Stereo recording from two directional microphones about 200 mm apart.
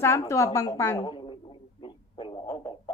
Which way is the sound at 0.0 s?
15° left (ahead or behind).